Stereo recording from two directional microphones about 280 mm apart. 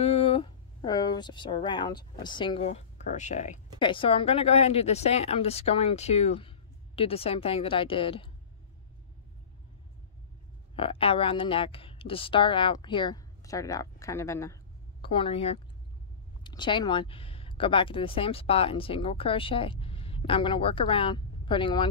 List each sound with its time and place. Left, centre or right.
0.0 s speech: left
10.8 s speech: centre